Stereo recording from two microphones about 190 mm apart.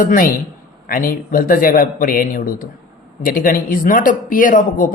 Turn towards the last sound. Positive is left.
turn(degrees=45)  # may be behind; listen again after turning